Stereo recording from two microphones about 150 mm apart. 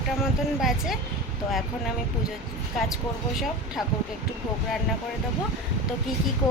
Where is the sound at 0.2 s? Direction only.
5° right (ahead or behind).